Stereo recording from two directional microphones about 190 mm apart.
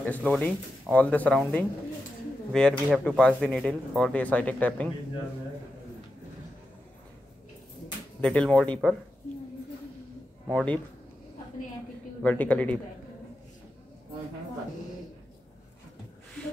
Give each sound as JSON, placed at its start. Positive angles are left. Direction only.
{"t": 0.0, "sound": "speech", "side_deg": 5}
{"t": 8.2, "sound": "speech", "side_deg": 5}
{"t": 10.5, "sound": "speech", "side_deg": 5}
{"t": 12.2, "sound": "speech", "side_deg": 5}